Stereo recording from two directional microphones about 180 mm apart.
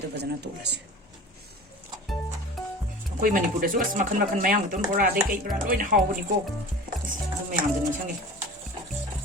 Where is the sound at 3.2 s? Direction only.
50° right (ahead or behind).